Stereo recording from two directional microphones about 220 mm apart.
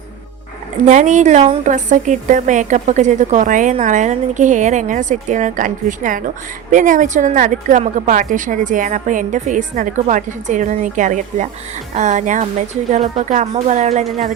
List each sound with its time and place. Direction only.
0.9 s a woman's voice: 35° right (ahead or behind)